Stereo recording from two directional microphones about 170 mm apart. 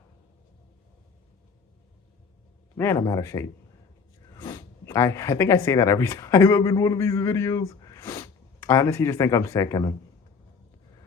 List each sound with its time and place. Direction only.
2.7 s a man's voice: 15° left (ahead or behind)